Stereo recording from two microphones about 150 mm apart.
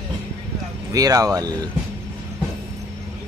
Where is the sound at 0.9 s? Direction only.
25° right (ahead or behind).